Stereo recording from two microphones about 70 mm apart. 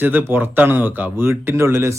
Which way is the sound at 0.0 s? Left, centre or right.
Right.